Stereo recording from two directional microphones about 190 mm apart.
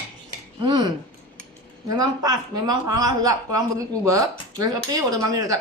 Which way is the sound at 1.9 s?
20° right (ahead or behind).